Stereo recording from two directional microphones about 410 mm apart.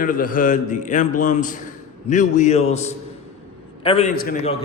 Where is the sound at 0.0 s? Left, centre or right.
Centre.